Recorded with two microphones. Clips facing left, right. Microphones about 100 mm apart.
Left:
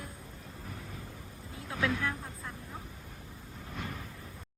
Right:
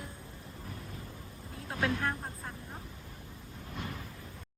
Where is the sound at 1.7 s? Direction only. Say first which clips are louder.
Even; 30° right (ahead or behind).